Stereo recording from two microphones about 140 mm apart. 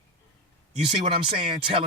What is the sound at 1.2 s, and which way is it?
Speech, 40° right (ahead or behind).